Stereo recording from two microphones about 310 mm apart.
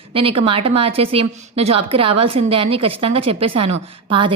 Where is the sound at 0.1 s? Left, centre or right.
Centre.